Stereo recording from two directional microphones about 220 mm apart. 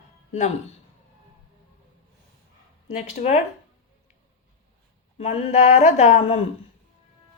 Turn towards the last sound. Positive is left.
turn(degrees=30)  # may be behind; listen again after turning